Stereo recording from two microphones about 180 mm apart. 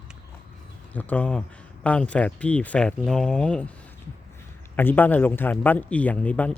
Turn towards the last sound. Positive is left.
turn(degrees=5)  # may be behind; listen again after turning